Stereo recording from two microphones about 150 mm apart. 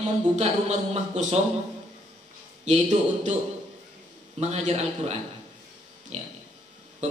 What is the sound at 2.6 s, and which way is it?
Speech, 50° right (ahead or behind).